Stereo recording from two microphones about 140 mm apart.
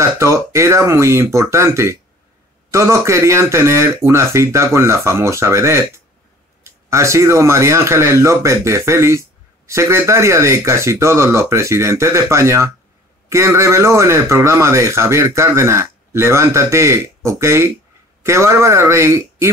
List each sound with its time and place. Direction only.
0.0 s speech: 20° right (ahead or behind)